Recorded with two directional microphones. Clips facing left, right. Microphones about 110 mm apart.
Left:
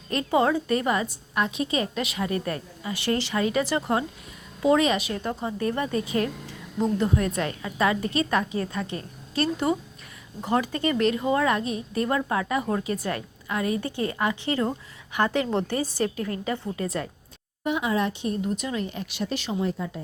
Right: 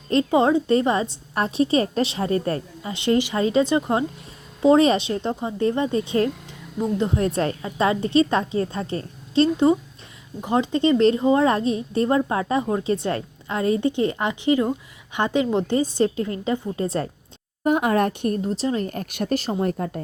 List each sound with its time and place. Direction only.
0.1 s a woman's voice: 25° right (ahead or behind)
4.6 s a woman's voice: 30° right (ahead or behind)
17.6 s speech: 50° right (ahead or behind)
18.4 s speech: 35° right (ahead or behind); by 20.0 s 55° right (ahead or behind)